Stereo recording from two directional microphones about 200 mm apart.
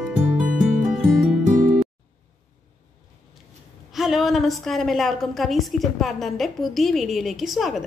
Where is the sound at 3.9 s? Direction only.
Centre (ahead or behind).